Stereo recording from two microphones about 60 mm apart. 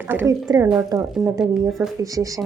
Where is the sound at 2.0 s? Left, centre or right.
Right.